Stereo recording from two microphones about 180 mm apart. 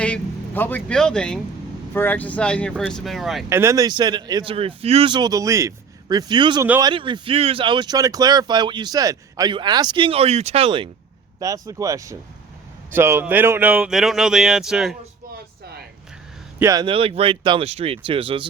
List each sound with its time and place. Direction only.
0.0 s speech: 10° left (ahead or behind)
3.5 s speech: 15° right (ahead or behind); by 10.8 s 30° right (ahead or behind)
11.3 s speech: 20° right (ahead or behind); by 14.9 s centre (ahead or behind)
16.6 s speech: 15° right (ahead or behind)
16.8 s speech: 30° right (ahead or behind)